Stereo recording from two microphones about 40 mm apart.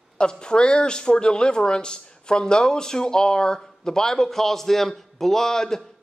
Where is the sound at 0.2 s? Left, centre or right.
Left.